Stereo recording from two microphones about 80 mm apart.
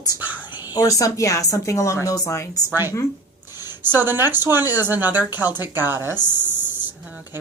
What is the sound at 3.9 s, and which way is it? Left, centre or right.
Speech, right.